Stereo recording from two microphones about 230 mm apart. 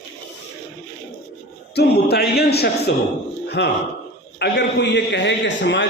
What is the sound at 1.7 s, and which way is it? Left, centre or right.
A man's voice, left.